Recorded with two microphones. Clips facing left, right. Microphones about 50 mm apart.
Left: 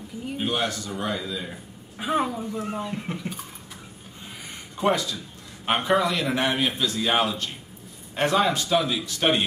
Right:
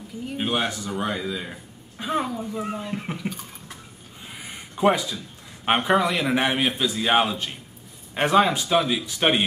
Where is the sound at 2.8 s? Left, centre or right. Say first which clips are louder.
Right 1 dB; centre.